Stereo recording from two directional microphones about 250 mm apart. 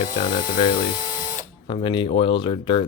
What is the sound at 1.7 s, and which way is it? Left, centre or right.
Speech, centre.